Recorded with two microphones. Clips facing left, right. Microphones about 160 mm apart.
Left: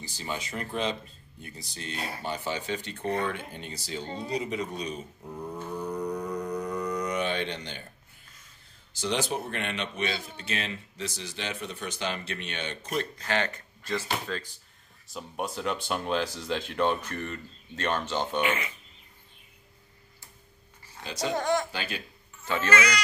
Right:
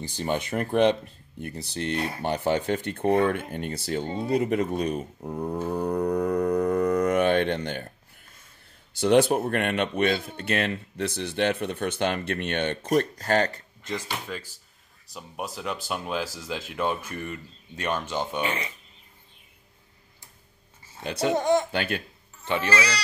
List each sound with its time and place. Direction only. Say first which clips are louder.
0.0 s speech: right 8 dB; 55° right (ahead or behind)
8.9 s speech: right 10 dB; 55° right (ahead or behind); by 13.6 s 40° right (ahead or behind)
13.8 s speech: left 1 dB; 15° right (ahead or behind)
15.0 s speech: left 1 dB; centre (ahead or behind)
18.4 s speech: left 1 dB; 35° right (ahead or behind)
21.0 s speech: right 6 dB; 60° right (ahead or behind)
21.4 s speech: right 4 dB; 20° right (ahead or behind)
21.7 s speech: right 7 dB; 60° right (ahead or behind)
22.4 s speech: right 1 dB; 20° right (ahead or behind)